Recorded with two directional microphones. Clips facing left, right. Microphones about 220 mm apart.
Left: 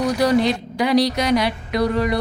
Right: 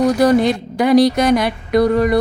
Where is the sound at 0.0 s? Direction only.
50° right (ahead or behind).